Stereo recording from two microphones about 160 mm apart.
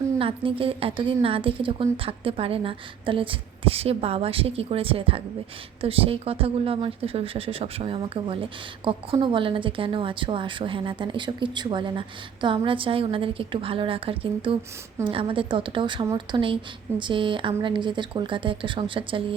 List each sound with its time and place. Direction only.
0.2 s a woman's voice: 35° right (ahead or behind)